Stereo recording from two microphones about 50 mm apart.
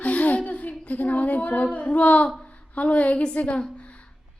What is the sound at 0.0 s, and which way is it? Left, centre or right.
A woman's voice, left.